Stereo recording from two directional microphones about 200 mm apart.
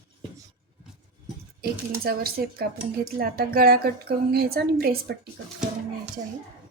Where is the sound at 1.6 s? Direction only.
50° right (ahead or behind).